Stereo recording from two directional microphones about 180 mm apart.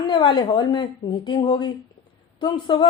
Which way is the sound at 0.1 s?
25° left (ahead or behind).